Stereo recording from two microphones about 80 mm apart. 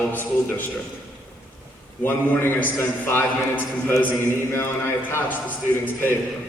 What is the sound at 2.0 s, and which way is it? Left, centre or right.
A man's voice, left.